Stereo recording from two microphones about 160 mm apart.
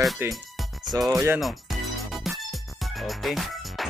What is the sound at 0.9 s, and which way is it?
Speech, 20° right (ahead or behind).